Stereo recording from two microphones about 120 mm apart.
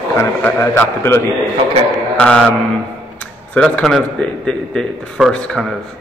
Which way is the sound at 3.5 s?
10° left (ahead or behind).